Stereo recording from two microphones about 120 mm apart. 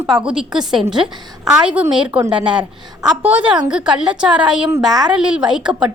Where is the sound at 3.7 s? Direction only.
5° right (ahead or behind).